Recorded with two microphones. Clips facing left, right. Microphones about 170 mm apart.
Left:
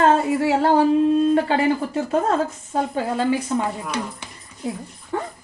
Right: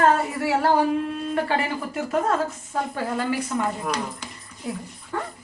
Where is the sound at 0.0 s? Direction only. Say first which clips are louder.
Left 3 dB; 25° left (ahead or behind).